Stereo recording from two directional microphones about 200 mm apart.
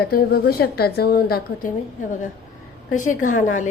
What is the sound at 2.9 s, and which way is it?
Speech, 40° left (ahead or behind).